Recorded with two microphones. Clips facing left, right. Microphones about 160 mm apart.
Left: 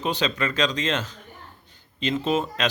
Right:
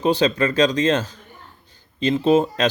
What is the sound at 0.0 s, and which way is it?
Speech, 35° right (ahead or behind).